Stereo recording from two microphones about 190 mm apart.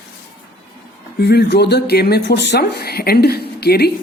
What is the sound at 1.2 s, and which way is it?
Speech, 60° left (ahead or behind).